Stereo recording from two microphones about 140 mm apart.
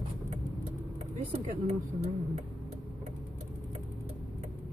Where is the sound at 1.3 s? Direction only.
50° right (ahead or behind).